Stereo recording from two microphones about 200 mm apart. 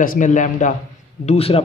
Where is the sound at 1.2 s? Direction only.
30° left (ahead or behind).